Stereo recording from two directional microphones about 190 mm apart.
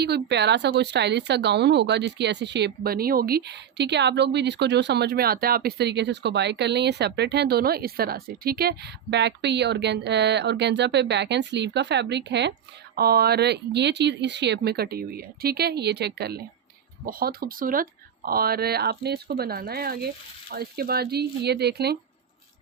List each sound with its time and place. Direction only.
0.0 s speech: 60° right (ahead or behind)
13.0 s speech: 55° right (ahead or behind)